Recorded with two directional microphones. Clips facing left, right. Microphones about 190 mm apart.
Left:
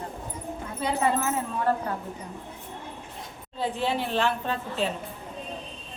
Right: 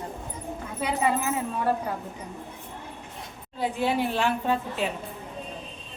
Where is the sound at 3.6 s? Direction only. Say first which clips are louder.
Right 2 dB; 10° right (ahead or behind).